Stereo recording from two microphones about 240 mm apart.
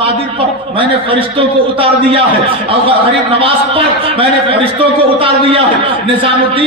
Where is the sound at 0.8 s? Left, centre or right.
Right.